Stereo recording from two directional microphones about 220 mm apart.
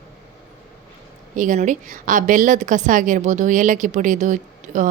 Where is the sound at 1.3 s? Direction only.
35° right (ahead or behind).